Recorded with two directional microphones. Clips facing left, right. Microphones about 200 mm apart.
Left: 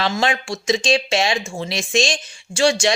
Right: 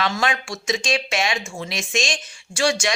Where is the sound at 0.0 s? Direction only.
25° left (ahead or behind).